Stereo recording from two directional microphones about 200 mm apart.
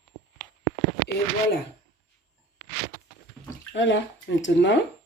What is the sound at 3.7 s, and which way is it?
Speech, 65° left (ahead or behind).